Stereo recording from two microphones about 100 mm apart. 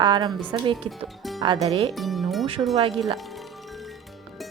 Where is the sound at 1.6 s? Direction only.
70° right (ahead or behind).